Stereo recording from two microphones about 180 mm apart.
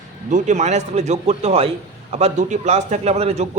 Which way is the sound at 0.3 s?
40° right (ahead or behind).